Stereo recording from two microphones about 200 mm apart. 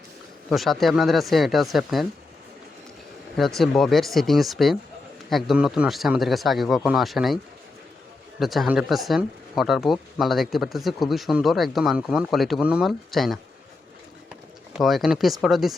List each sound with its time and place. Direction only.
0.5 s speech: centre (ahead or behind)
3.6 s speech: centre (ahead or behind)
8.4 s speech: centre (ahead or behind)
14.8 s speech: centre (ahead or behind)